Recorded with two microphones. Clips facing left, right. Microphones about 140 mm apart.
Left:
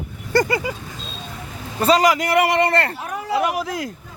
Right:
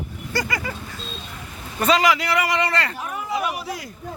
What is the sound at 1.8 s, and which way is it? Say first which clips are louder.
A man's voice: left 3 dB; 40° left (ahead or behind).